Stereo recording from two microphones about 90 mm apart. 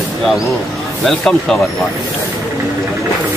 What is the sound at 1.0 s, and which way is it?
Speech, 5° left (ahead or behind).